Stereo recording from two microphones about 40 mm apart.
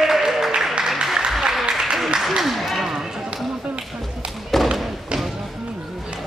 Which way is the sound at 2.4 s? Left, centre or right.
Centre.